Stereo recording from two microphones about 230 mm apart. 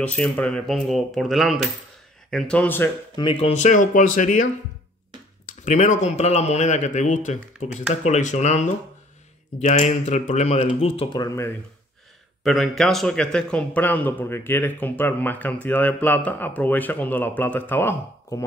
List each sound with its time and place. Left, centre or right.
0.0 s speech: centre
3.3 s speech: left
5.5 s speech: left; by 11.5 s centre
12.4 s speech: centre